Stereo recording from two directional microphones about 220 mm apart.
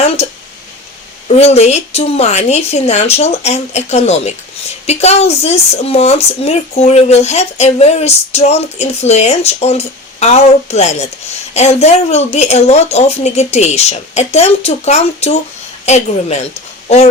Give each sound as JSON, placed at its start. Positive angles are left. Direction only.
{"t": 0.2, "sound": "speech", "side_deg": 30}